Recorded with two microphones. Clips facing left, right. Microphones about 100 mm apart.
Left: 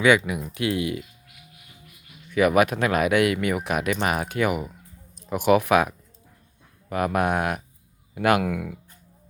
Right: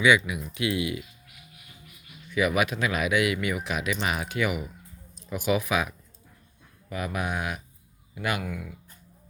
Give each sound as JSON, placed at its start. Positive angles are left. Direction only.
{"t": 0.3, "sound": "speech", "side_deg": 45}
{"t": 2.3, "sound": "speech", "side_deg": 50}
{"t": 8.1, "sound": "speech", "side_deg": 70}